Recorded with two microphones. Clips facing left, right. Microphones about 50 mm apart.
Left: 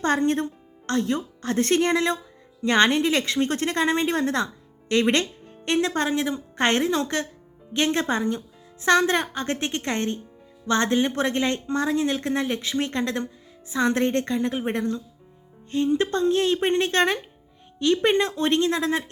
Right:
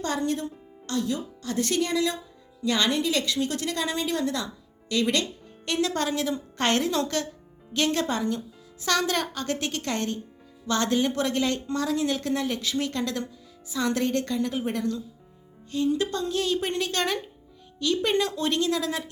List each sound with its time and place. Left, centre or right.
0.0 s a woman's voice: left